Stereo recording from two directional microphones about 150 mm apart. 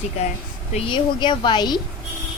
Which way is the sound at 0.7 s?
35° left (ahead or behind).